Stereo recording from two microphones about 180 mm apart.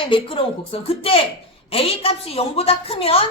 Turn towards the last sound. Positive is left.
turn(degrees=30)  # may be behind; listen again after turning